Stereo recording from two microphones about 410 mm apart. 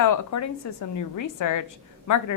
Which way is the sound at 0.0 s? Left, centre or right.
Left.